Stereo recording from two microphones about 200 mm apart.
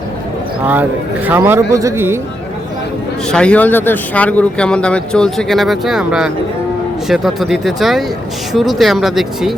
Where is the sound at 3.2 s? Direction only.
5° left (ahead or behind).